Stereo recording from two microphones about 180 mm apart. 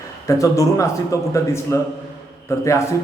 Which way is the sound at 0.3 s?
20° left (ahead or behind).